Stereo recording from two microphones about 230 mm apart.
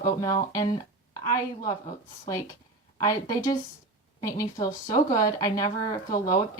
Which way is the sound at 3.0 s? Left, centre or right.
Centre.